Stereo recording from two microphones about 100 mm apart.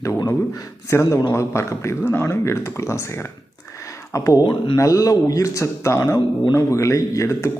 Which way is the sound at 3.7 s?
30° left (ahead or behind).